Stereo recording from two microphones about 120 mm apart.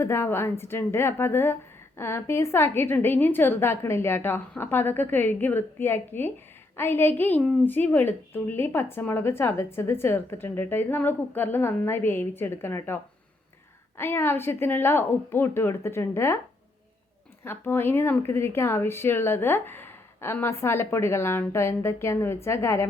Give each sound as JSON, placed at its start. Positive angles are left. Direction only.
{"t": 0.0, "sound": "a woman's voice", "side_deg": 20}
{"t": 17.4, "sound": "a woman's voice", "side_deg": 20}